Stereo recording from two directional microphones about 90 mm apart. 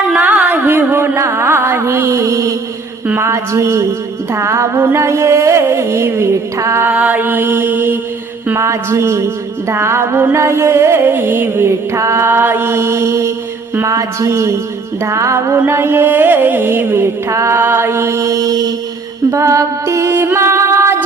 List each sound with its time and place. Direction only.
0.1 s music: 15° right (ahead or behind); by 6.9 s 30° right (ahead or behind)
6.9 s music: 20° right (ahead or behind)